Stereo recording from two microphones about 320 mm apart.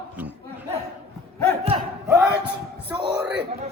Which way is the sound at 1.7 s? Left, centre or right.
Centre.